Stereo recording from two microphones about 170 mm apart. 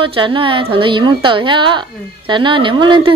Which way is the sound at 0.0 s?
30° right (ahead or behind).